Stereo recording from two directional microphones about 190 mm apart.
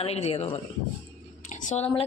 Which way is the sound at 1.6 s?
35° left (ahead or behind).